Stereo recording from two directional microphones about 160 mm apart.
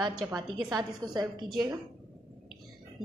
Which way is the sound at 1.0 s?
25° right (ahead or behind).